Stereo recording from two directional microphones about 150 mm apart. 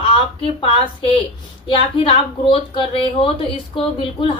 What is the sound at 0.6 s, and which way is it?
Speech, 35° left (ahead or behind).